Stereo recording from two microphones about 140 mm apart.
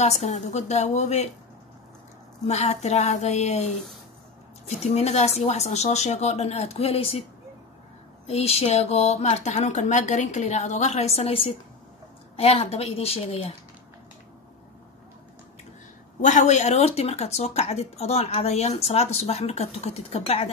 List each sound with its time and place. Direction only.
0.0 s speech: 55° left (ahead or behind)
2.4 s speech: 50° left (ahead or behind)
4.8 s speech: 50° left (ahead or behind)
8.3 s speech: 45° left (ahead or behind)
16.2 s speech: 60° left (ahead or behind)